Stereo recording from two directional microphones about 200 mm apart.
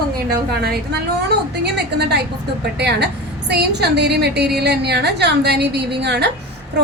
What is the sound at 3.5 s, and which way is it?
A woman's voice, 55° right (ahead or behind).